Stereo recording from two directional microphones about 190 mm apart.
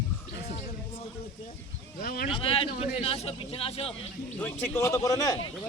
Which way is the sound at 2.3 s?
30° left (ahead or behind).